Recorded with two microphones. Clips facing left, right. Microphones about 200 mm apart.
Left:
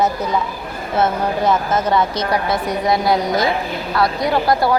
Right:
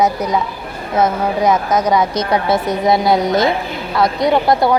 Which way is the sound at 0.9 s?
15° right (ahead or behind).